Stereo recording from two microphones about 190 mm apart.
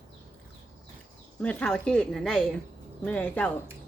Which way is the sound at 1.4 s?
5° left (ahead or behind).